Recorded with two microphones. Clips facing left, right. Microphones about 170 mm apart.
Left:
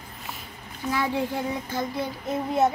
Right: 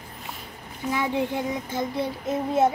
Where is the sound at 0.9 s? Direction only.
20° right (ahead or behind).